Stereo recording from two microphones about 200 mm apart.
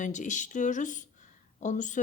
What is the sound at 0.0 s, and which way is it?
Speech, 40° left (ahead or behind).